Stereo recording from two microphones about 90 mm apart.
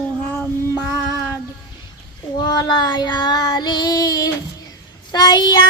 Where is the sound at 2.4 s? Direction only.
50° left (ahead or behind).